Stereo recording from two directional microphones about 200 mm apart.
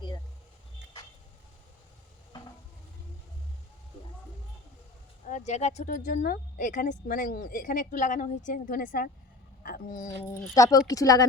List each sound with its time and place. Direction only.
5.2 s speech: 35° left (ahead or behind)
10.3 s speech: 15° left (ahead or behind)